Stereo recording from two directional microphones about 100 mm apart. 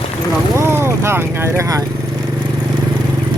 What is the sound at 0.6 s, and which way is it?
Speech, 25° right (ahead or behind).